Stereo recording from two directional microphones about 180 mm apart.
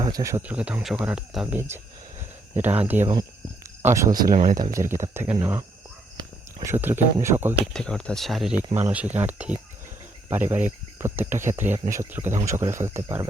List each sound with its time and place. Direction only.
0.0 s speech: 20° right (ahead or behind)
0.4 s speech: 5° right (ahead or behind)
2.8 s speech: 10° right (ahead or behind)
4.3 s speech: 50° right (ahead or behind)
4.8 s speech: 15° right (ahead or behind)
6.7 s speech: 15° right (ahead or behind)
7.7 s speech: 5° left (ahead or behind); by 13.2 s 15° right (ahead or behind)